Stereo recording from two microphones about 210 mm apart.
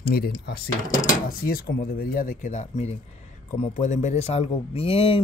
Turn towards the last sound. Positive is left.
turn(degrees=25)  # may be behind; listen again after turning